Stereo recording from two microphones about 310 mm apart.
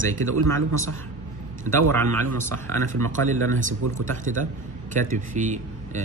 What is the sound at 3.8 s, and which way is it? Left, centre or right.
Speech, right.